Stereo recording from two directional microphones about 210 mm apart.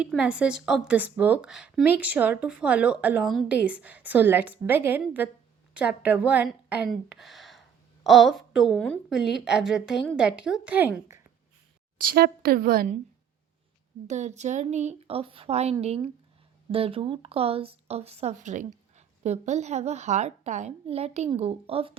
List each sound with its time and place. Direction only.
0.0 s a woman's voice: 5° right (ahead or behind)
11.9 s a woman's voice: 45° right (ahead or behind)
14.1 s speech: 35° right (ahead or behind)